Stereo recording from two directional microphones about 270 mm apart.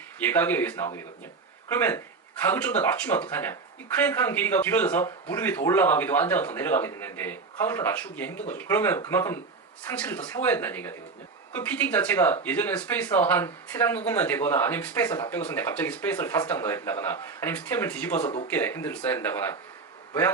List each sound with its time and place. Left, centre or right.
0.2 s speech: centre
18.2 s speech: left
18.4 s speech: centre